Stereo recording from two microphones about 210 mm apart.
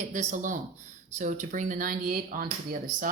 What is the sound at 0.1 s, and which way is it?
Speech, 35° right (ahead or behind).